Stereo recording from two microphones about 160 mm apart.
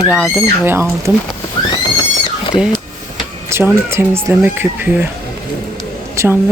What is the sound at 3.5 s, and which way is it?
Speech, 15° right (ahead or behind).